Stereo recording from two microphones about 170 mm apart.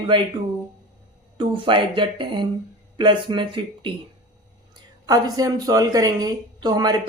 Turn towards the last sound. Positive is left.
turn(degrees=-25)  # may be behind; listen again after turning